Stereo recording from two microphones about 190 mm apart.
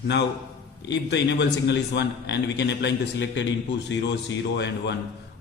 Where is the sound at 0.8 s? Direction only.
65° left (ahead or behind).